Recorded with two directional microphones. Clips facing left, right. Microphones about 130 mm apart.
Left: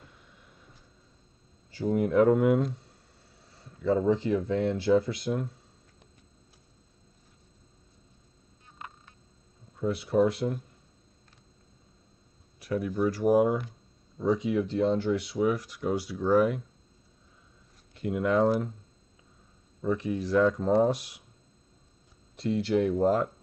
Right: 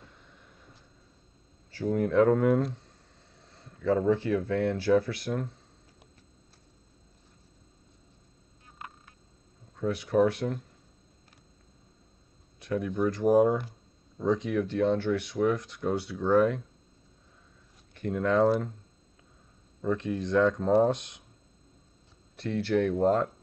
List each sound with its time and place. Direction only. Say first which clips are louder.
1.7 s speech: left 1 dB; 15° left (ahead or behind)
3.3 s a sound: even; 5° left (ahead or behind)
3.9 s speech: even; 15° left (ahead or behind)
8.7 s frog: even; 5° right (ahead or behind)
9.8 s speech: even; 10° left (ahead or behind)
12.5 s speech: even; 5° left (ahead or behind)
18.0 s speech: even; 10° left (ahead or behind)
19.8 s speech: left 1 dB; 5° left (ahead or behind)
22.5 s speech: left 1 dB; 5° left (ahead or behind)